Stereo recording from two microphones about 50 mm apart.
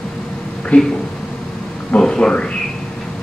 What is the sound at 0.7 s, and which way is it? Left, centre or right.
Speech, left.